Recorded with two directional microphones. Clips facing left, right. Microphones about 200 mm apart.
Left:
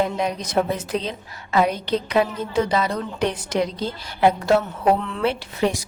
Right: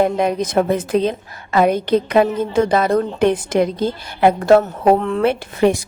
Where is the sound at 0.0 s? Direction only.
55° right (ahead or behind).